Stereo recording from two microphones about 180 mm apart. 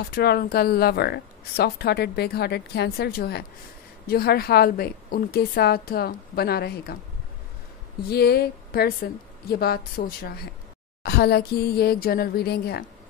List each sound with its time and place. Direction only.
0.1 s speech: 60° left (ahead or behind)
8.1 s speech: 60° left (ahead or behind)